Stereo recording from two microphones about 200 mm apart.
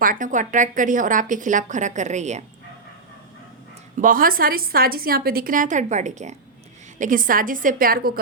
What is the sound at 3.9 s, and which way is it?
A woman's voice, 45° right (ahead or behind).